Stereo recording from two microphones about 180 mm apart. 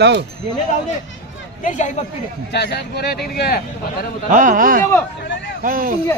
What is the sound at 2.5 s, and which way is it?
Speech, 65° left (ahead or behind).